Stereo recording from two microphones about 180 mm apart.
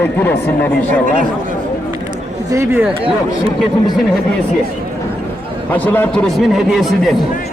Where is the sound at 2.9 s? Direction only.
30° right (ahead or behind).